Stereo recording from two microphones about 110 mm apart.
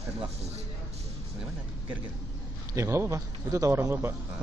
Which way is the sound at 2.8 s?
25° right (ahead or behind).